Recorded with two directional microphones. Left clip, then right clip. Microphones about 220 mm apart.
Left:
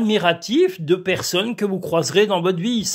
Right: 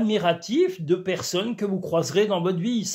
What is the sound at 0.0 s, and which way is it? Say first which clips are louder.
Speech: left 4 dB; 35° left (ahead or behind).